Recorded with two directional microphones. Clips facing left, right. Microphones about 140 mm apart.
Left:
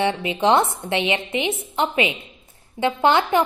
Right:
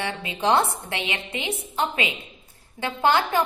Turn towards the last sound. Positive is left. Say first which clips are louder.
# left 3 dB
turn(degrees=20)  # may be behind; listen again after turning